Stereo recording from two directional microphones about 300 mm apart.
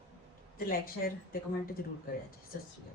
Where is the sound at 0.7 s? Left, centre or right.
Left.